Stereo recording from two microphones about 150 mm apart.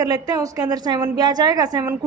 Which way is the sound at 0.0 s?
25° right (ahead or behind).